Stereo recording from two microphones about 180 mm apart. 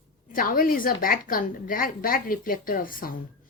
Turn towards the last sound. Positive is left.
turn(degrees=50)  # may be behind; listen again after turning